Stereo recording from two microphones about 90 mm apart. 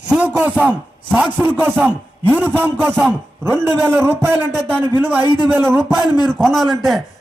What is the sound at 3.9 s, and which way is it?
Speech, 25° right (ahead or behind).